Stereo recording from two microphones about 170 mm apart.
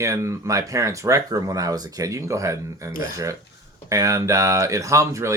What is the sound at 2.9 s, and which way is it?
Speech, 55° left (ahead or behind).